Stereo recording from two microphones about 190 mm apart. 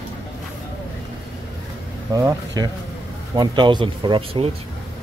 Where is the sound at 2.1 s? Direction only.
20° right (ahead or behind).